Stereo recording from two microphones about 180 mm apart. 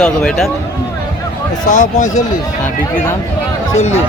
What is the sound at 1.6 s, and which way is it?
Speech, 45° left (ahead or behind).